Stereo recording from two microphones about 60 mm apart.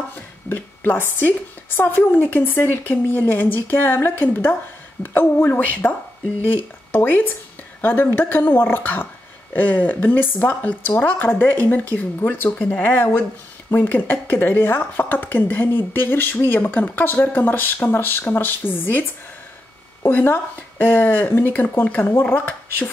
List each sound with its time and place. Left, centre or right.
0.1 s a sound: left
1.8 s speech: left
12.4 s speech: left
20.1 s speech: left